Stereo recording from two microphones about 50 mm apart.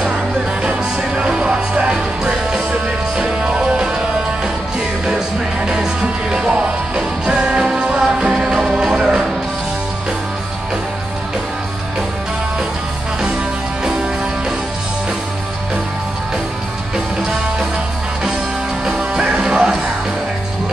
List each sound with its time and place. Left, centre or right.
0.6 s music: centre
5.6 s music: centre
16.9 s music: centre
18.9 s music: centre